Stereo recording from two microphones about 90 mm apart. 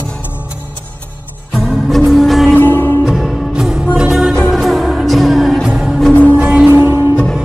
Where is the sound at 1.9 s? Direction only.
Centre (ahead or behind).